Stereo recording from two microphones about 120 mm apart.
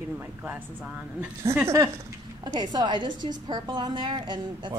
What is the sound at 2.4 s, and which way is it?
A woman's voice, 35° right (ahead or behind).